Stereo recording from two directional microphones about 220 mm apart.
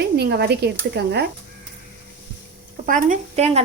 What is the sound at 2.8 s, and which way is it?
Speech, 35° right (ahead or behind).